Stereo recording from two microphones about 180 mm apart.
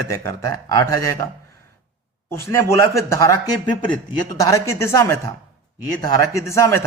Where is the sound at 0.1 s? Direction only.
15° left (ahead or behind).